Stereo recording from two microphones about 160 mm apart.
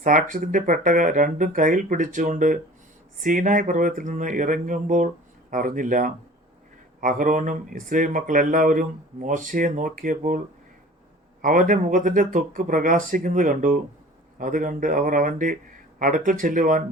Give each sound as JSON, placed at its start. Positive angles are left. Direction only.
{"t": 0.0, "sound": "speech", "side_deg": -55}
{"t": 11.4, "sound": "speech", "side_deg": -55}